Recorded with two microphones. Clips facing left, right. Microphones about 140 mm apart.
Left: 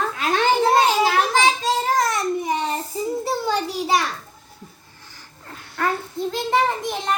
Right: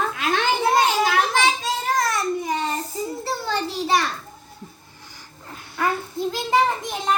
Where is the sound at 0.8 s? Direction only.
30° left (ahead or behind).